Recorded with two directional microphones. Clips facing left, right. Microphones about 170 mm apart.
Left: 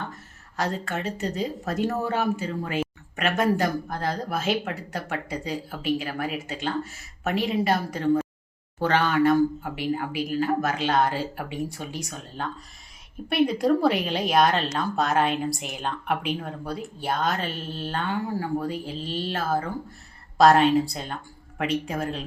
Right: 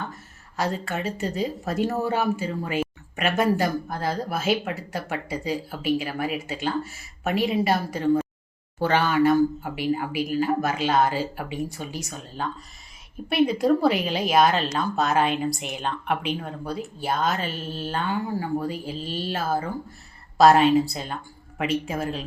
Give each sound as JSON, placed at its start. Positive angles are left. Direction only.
{"t": 0.5, "sound": "a woman's voice", "side_deg": -10}